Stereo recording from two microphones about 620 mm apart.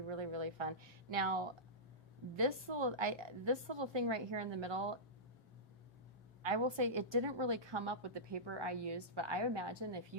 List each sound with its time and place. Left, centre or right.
0.1 s a woman's voice: right
6.4 s a woman's voice: right